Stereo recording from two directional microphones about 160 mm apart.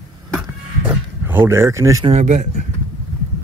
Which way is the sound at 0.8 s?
15° right (ahead or behind).